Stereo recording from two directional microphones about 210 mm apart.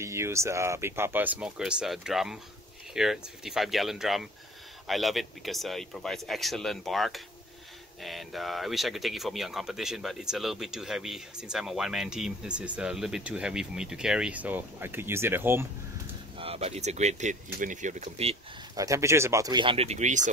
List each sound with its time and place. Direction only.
0.0 s speech: 15° right (ahead or behind)
16.3 s speech: 30° right (ahead or behind)
18.8 s speech: 15° right (ahead or behind); by 20.2 s 35° right (ahead or behind)